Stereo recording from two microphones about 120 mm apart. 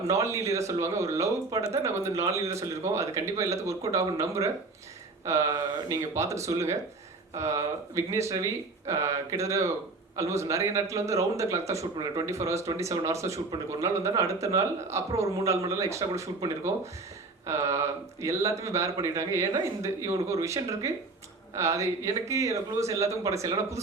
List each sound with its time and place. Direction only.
0.1 s a man's voice: 25° right (ahead or behind)